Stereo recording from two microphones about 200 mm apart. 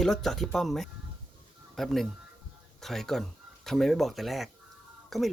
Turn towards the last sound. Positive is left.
turn(degrees=0)  # may be behind; listen again after turning